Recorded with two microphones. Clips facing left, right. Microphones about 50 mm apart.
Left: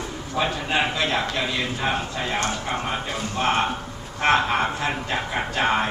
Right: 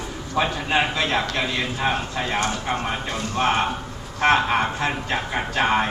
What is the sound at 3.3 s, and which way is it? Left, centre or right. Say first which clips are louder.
A man's voice: right 1 dB; centre.